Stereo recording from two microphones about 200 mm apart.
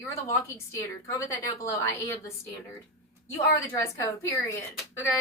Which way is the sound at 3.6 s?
15° left (ahead or behind).